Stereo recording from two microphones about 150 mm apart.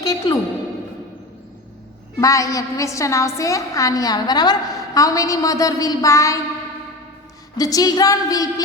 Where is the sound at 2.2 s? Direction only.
20° left (ahead or behind).